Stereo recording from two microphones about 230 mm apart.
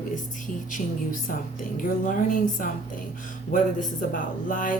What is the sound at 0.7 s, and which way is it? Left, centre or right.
Speech, left.